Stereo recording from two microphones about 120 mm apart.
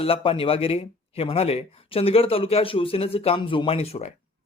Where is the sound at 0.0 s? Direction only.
50° left (ahead or behind).